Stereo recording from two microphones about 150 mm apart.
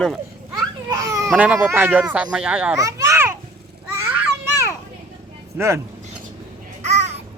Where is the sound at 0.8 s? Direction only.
20° right (ahead or behind).